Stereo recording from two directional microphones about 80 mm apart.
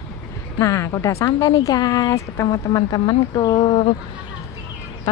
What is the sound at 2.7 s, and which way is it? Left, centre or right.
Speech, left.